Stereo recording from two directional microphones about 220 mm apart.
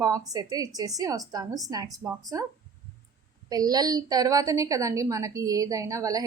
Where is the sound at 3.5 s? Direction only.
15° right (ahead or behind).